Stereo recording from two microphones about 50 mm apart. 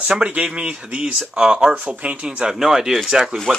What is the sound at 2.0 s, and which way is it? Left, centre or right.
Speech, right.